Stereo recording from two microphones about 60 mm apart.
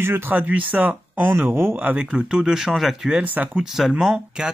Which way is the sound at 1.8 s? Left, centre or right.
Right.